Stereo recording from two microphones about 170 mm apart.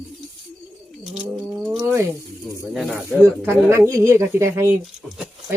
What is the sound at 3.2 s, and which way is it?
Speech, 15° right (ahead or behind).